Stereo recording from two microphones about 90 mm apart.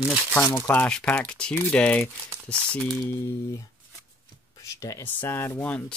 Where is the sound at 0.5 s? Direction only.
25° left (ahead or behind).